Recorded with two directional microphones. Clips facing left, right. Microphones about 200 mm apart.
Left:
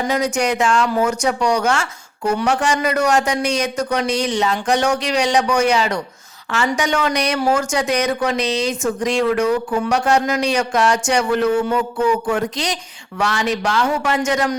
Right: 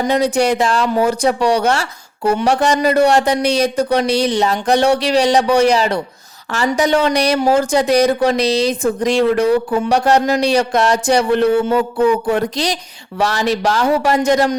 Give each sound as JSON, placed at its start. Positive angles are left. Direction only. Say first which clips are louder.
{"t": 0.1, "sound": "speech", "louder": "right 5 dB", "side_deg": -30}